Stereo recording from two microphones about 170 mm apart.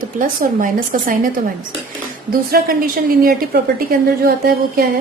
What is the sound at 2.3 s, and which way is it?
A woman's voice, 60° right (ahead or behind).